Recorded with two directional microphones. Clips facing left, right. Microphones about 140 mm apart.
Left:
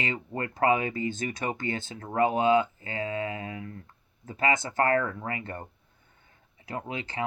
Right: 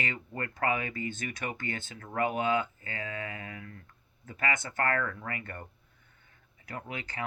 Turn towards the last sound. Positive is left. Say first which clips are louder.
# left 5 dB
turn(degrees=30)  # may be behind; listen again after turning